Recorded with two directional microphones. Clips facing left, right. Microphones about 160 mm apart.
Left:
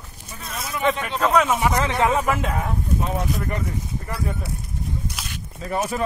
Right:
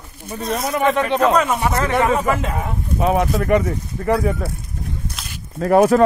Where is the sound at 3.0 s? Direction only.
75° right (ahead or behind).